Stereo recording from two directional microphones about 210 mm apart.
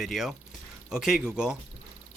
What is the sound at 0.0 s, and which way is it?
Speech, centre (ahead or behind).